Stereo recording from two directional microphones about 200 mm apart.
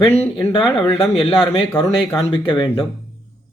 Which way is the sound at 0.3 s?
25° left (ahead or behind).